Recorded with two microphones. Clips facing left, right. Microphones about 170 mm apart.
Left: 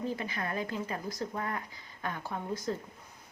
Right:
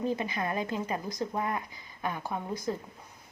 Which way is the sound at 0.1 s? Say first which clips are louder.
Right 4 dB; 20° right (ahead or behind).